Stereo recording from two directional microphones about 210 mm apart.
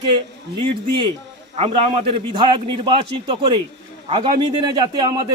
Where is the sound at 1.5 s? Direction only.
30° right (ahead or behind).